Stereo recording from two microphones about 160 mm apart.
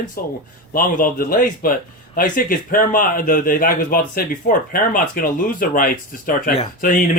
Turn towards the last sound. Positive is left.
turn(degrees=60)  # may be behind; listen again after turning